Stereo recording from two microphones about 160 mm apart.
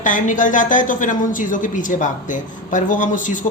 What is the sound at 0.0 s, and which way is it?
A woman's voice, 55° left (ahead or behind).